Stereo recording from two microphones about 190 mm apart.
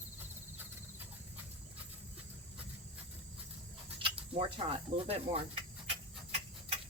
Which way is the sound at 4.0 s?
30° right (ahead or behind).